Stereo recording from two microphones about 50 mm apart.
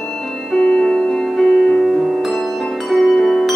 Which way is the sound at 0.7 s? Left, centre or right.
Centre.